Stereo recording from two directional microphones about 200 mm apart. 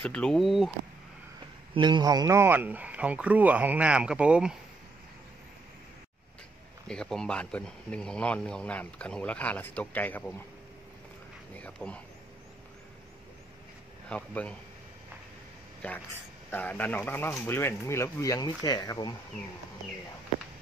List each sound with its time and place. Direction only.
0.0 s speech: 5° left (ahead or behind)
1.8 s speech: 20° right (ahead or behind); by 4.6 s 5° right (ahead or behind)
6.9 s speech: 5° left (ahead or behind)
11.5 s speech: 5° left (ahead or behind)
14.0 s speech: 5° left (ahead or behind)
15.8 s speech: 10° left (ahead or behind)